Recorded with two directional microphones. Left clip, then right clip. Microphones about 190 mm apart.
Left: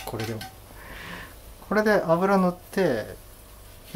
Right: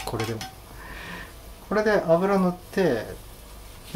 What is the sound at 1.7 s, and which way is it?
Speech, 20° left (ahead or behind).